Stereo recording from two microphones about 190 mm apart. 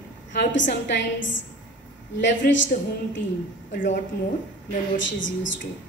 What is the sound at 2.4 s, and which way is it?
Speech, 50° left (ahead or behind).